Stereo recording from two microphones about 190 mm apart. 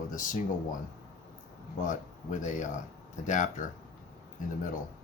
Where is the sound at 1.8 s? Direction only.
40° left (ahead or behind).